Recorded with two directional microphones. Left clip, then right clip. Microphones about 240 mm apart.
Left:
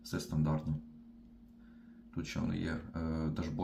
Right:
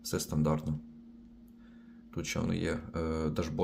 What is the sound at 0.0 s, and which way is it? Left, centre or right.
Speech, right.